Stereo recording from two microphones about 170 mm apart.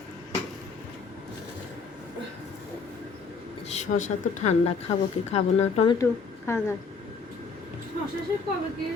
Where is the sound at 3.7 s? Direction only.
45° left (ahead or behind).